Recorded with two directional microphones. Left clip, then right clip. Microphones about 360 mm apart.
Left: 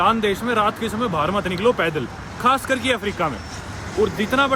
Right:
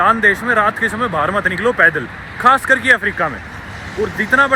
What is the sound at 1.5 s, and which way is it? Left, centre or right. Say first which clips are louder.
Speech: right 9 dB; centre.